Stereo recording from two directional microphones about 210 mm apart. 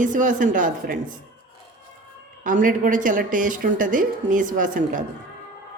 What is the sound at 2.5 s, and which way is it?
A woman's voice, 40° right (ahead or behind).